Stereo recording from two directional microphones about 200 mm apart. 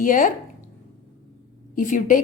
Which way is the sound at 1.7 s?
40° left (ahead or behind).